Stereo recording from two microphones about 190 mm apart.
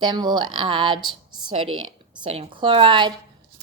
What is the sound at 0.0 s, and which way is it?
A woman's voice, 20° right (ahead or behind).